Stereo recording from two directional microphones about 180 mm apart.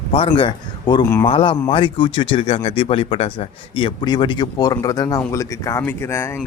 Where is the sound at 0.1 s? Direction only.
30° left (ahead or behind).